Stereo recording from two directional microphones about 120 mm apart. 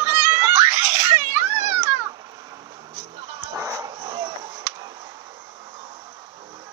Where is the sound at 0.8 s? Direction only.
20° right (ahead or behind).